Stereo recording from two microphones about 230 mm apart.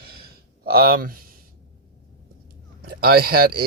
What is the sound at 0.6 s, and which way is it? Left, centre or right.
Speech, right.